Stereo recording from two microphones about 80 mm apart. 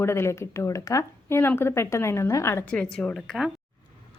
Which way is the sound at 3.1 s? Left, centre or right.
Centre.